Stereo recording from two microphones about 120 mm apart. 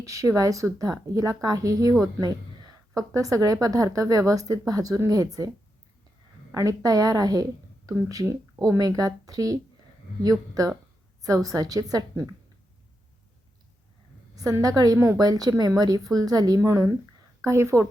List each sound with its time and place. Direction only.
0.0 s a woman's voice: 25° right (ahead or behind)
6.5 s a woman's voice: 30° right (ahead or behind)
14.3 s a woman's voice: 30° right (ahead or behind)